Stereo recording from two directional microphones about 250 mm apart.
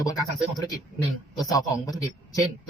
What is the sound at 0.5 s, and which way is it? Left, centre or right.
Speech, centre.